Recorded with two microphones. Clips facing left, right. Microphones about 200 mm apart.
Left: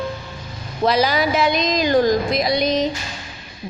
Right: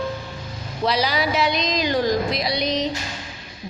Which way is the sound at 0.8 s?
50° left (ahead or behind).